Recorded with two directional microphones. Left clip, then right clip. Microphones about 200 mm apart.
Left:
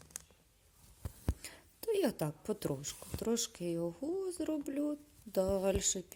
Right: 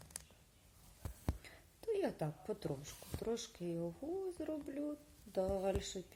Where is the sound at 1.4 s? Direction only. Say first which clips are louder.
Left 5 dB; 50° left (ahead or behind).